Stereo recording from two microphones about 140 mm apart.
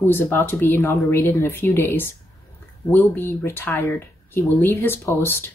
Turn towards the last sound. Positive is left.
turn(degrees=15)  # may be behind; listen again after turning